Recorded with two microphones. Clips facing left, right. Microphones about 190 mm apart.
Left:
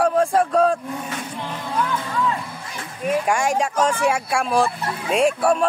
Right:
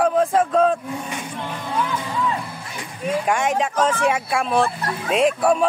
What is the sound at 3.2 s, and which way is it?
Speech, centre (ahead or behind).